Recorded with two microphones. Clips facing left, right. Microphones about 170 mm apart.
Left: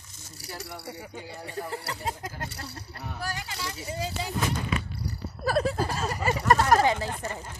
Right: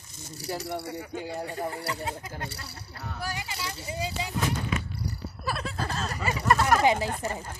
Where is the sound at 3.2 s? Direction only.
10° right (ahead or behind).